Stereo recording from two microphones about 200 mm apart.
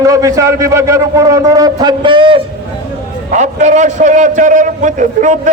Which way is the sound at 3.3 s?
35° right (ahead or behind).